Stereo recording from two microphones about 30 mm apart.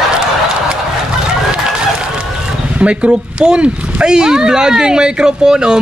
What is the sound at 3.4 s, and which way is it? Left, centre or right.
Speech, right.